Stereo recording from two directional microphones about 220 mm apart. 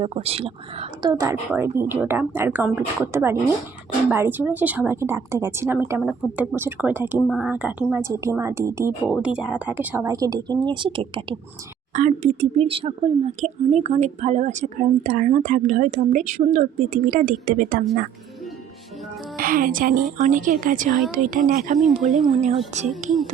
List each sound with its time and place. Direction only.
0.0 s speech: 25° right (ahead or behind)
1.2 s a woman's voice: 10° right (ahead or behind)
11.9 s speech: 35° right (ahead or behind)
19.4 s speech: 40° right (ahead or behind)
21.8 s speech: centre (ahead or behind)
22.3 s speech: 30° right (ahead or behind)